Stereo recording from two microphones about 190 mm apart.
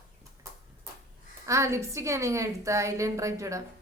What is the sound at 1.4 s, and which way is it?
A woman's voice, 15° right (ahead or behind).